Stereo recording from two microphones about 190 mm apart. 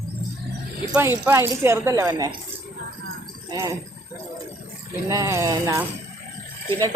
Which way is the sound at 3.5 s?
20° right (ahead or behind).